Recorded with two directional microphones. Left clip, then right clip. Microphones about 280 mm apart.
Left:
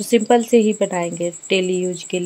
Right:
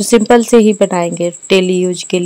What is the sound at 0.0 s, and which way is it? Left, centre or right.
A woman's voice, right.